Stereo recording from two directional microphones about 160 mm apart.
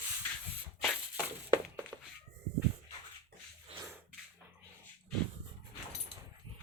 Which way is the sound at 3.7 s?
35° right (ahead or behind).